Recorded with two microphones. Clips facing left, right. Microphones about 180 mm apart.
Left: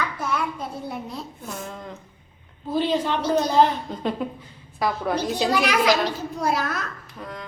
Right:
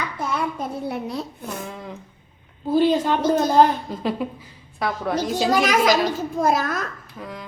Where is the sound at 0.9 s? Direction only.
75° right (ahead or behind).